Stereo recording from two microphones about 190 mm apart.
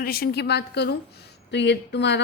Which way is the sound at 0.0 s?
55° left (ahead or behind).